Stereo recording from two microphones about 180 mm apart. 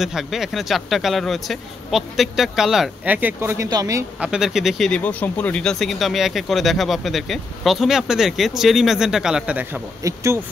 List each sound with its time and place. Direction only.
0.0 s speech: centre (ahead or behind); by 4.0 s 20° right (ahead or behind)
4.2 s speech: 5° right (ahead or behind)
10.0 s speech: 15° right (ahead or behind)